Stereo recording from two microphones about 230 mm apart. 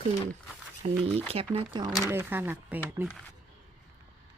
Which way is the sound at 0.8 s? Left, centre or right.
Right.